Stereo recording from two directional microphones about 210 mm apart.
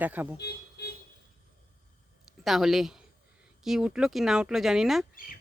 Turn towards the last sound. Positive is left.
turn(degrees=0)  # may be behind; listen again after turning